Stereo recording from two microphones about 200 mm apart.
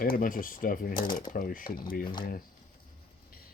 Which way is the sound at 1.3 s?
45° left (ahead or behind).